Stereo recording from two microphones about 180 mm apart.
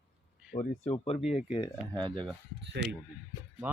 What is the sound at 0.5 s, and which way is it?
Speech, 35° left (ahead or behind).